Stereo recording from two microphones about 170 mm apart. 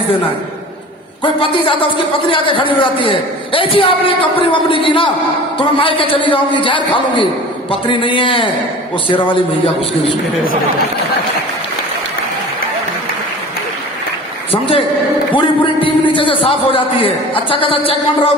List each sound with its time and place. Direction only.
1.2 s a man's voice: 30° left (ahead or behind)
14.5 s a man's voice: 30° left (ahead or behind)